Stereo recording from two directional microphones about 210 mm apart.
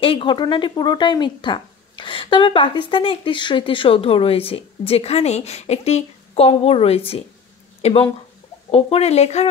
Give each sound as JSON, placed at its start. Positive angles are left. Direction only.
{"t": 0.0, "sound": "speech", "side_deg": 25}